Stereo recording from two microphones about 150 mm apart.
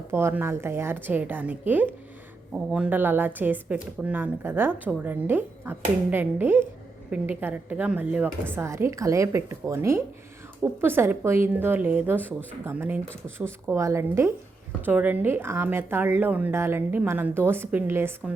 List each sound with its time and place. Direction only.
0.1 s a woman's voice: 15° right (ahead or behind)